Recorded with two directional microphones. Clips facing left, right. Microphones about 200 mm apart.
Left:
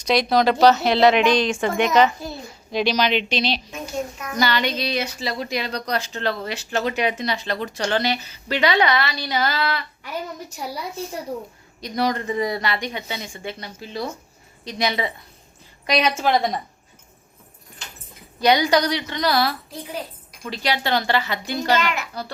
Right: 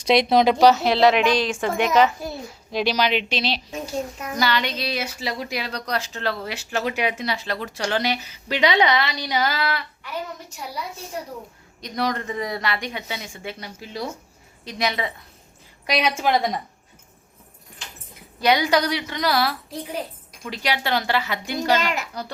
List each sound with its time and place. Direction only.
0.0 s a woman's voice: 25° right (ahead or behind)
0.6 s a child's voice: 5° right (ahead or behind)
3.7 s a woman's voice: 30° right (ahead or behind)
4.4 s a woman's voice: centre (ahead or behind)
11.8 s a child's voice: centre (ahead or behind)
18.3 s a woman's voice: 5° right (ahead or behind)
21.8 s a woman's voice: 40° right (ahead or behind)